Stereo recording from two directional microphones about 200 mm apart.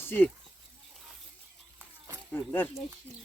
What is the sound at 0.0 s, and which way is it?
Speech, 10° left (ahead or behind).